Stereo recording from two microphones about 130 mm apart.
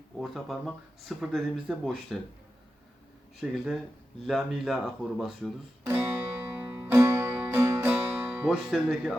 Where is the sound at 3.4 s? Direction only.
Centre (ahead or behind).